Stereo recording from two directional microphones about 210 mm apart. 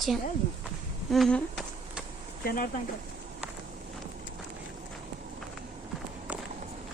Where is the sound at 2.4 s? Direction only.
45° left (ahead or behind).